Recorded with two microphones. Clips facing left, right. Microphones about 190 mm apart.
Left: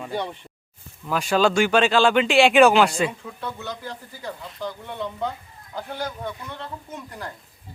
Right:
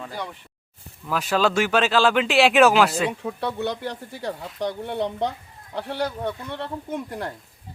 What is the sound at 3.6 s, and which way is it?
Speech, 70° right (ahead or behind).